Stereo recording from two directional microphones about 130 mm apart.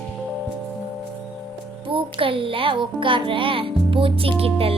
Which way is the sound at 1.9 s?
45° right (ahead or behind).